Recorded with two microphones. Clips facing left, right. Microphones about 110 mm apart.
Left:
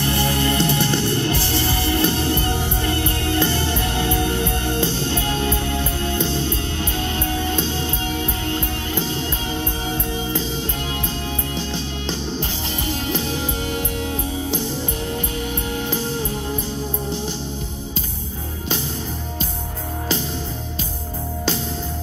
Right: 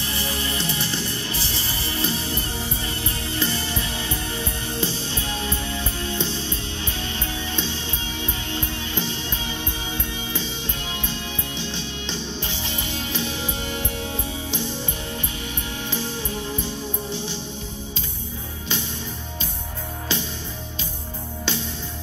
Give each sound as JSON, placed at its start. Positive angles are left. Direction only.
{"t": 0.0, "sound": "music", "side_deg": 60}
{"t": 11.5, "sound": "music", "side_deg": 40}
{"t": 15.9, "sound": "music", "side_deg": 45}